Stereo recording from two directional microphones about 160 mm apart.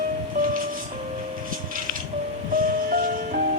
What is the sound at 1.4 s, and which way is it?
Music, 60° right (ahead or behind).